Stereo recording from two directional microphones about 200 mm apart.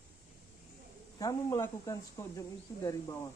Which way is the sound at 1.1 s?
15° left (ahead or behind).